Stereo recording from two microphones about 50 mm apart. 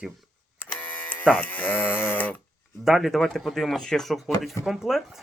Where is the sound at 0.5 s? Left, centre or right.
Left.